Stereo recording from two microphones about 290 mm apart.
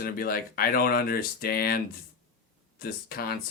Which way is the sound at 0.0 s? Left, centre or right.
Left.